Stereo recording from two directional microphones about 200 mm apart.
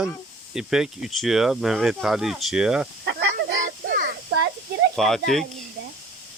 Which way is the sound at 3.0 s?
65° right (ahead or behind).